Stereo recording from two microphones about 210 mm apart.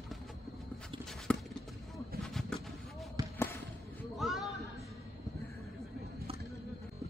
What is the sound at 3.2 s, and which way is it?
Basketball bounce, 20° right (ahead or behind).